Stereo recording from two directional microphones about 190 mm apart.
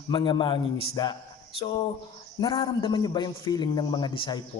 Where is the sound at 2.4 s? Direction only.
25° left (ahead or behind).